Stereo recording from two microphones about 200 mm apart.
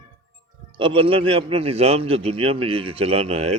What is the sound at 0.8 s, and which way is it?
A man's voice, 25° right (ahead or behind).